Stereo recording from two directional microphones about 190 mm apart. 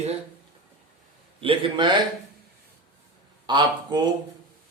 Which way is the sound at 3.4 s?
25° right (ahead or behind).